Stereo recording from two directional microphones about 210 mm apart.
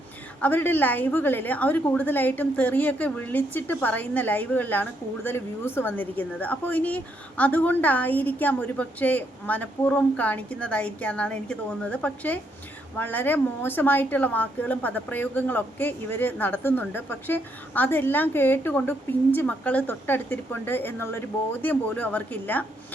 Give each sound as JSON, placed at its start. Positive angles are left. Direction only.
{"t": 0.4, "sound": "a woman's voice", "side_deg": 10}